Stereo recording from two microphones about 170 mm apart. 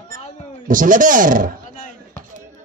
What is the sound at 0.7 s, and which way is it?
Speech, 50° right (ahead or behind).